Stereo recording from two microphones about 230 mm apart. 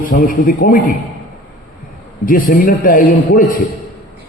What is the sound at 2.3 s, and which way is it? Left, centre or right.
A man's voice, left.